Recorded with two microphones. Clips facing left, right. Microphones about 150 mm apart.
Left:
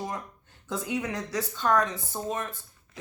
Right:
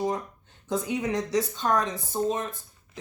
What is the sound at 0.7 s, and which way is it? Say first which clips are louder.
Speech: right 4 dB; 20° right (ahead or behind).